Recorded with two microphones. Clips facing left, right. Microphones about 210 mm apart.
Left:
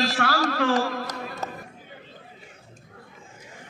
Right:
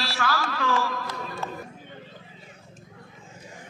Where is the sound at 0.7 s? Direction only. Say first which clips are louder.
Left 3 dB; 40° left (ahead or behind).